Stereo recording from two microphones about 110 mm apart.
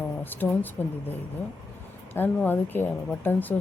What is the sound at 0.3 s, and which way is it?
Speech, 15° left (ahead or behind).